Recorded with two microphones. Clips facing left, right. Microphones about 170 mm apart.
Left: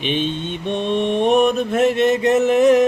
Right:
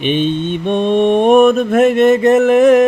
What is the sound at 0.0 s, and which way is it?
Mantra, 55° right (ahead or behind).